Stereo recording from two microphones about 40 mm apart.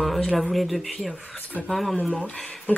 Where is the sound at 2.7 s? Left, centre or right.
Left.